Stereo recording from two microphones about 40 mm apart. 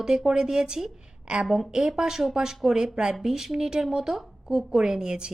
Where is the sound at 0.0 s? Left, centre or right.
Centre.